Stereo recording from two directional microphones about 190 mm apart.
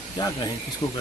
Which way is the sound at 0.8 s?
30° left (ahead or behind).